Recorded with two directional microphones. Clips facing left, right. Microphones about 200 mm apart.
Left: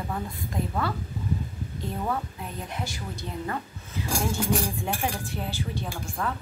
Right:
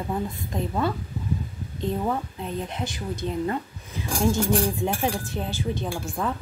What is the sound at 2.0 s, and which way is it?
A woman's voice, 25° right (ahead or behind).